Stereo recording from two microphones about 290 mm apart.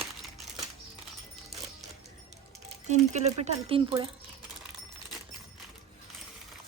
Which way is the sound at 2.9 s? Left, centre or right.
Right.